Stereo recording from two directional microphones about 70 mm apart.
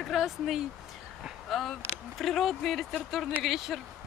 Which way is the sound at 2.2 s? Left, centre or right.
Centre.